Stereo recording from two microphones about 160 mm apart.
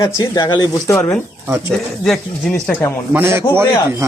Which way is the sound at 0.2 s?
25° left (ahead or behind).